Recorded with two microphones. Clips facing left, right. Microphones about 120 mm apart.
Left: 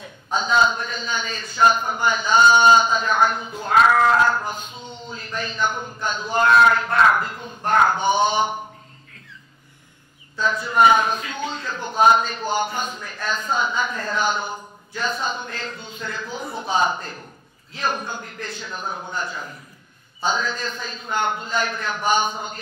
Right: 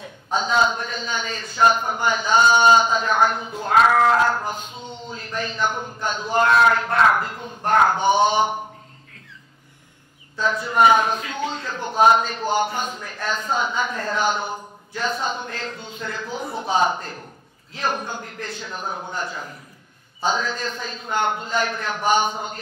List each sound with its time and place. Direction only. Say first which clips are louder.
0.0 s a sound: right 1 dB; 60° right (ahead or behind)
0.7 s a man's voice: left 1 dB; 55° right (ahead or behind)
3.8 s a sound: left 1 dB; 40° right (ahead or behind)
4.5 s a man's voice: right 1 dB; 60° right (ahead or behind); by 8.0 s 40° right (ahead or behind)
8.0 s a man's voice: right 2 dB; 60° right (ahead or behind)
10.4 s a man's voice: even; 55° right (ahead or behind)
20.2 s a man's voice: right 1 dB; 55° right (ahead or behind)